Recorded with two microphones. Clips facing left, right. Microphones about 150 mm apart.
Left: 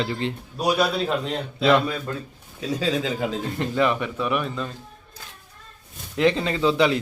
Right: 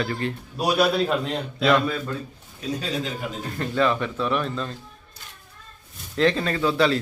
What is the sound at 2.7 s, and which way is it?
Speech, 90° left.